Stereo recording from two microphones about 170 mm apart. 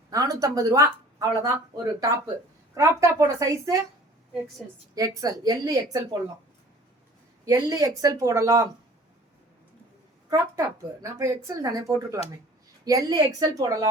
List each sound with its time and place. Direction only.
0.1 s speech: 20° right (ahead or behind)
4.6 s a woman's voice: 5° right (ahead or behind)
4.9 s speech: 20° right (ahead or behind)
7.4 s speech: 20° right (ahead or behind)
10.2 s speech: 20° right (ahead or behind)